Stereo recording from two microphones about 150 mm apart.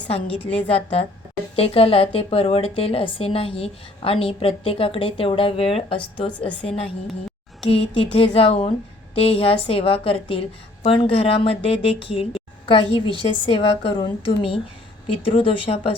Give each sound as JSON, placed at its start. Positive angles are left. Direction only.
{"t": 0.1, "sound": "a woman's voice", "side_deg": 40}